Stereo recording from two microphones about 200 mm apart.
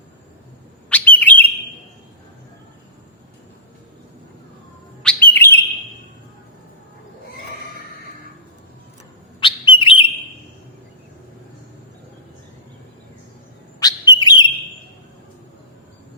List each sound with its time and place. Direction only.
0.9 s bird: 5° left (ahead or behind)
5.0 s bird: 10° left (ahead or behind)
9.4 s bird: 25° left (ahead or behind)
13.7 s bird: 20° left (ahead or behind)